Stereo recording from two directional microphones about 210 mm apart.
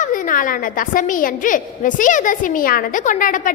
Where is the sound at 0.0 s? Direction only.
40° left (ahead or behind).